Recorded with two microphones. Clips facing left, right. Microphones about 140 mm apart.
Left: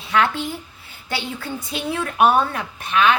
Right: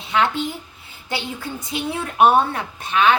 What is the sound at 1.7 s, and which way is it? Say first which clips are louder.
A woman's voice: even; 25° right (ahead or behind).